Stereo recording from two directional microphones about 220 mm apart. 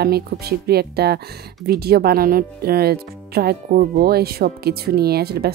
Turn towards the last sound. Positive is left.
turn(degrees=-45)  # may be behind; listen again after turning